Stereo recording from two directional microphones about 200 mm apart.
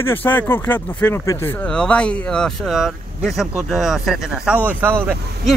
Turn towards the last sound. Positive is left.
turn(degrees=-10)  # may be behind; listen again after turning